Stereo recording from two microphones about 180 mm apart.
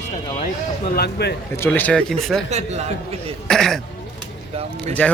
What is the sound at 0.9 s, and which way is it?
Speech, 65° left (ahead or behind).